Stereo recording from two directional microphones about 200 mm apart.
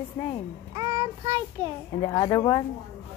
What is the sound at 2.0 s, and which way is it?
Speech, 20° left (ahead or behind).